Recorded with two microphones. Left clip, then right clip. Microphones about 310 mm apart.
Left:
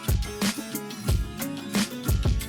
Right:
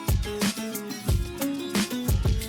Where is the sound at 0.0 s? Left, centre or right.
Centre.